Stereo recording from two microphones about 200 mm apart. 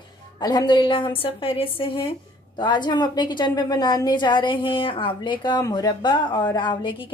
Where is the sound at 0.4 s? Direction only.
20° left (ahead or behind).